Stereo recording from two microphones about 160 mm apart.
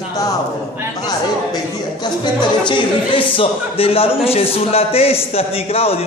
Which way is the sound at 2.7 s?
30° left (ahead or behind).